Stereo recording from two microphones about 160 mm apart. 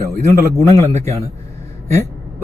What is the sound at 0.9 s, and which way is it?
Speech, 45° right (ahead or behind).